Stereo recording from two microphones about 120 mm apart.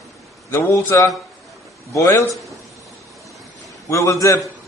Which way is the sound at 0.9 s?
25° left (ahead or behind).